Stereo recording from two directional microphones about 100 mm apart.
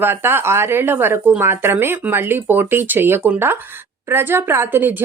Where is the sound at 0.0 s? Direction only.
20° right (ahead or behind).